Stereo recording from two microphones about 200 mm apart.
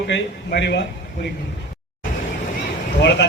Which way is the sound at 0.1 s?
60° left (ahead or behind).